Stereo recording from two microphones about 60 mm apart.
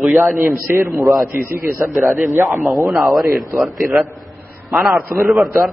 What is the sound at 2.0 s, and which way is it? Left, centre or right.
A man's voice, centre.